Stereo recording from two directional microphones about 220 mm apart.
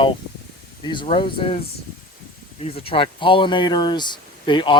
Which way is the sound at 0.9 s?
20° left (ahead or behind).